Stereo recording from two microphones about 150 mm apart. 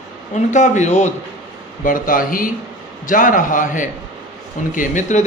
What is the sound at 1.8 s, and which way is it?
Speech, 70° left (ahead or behind).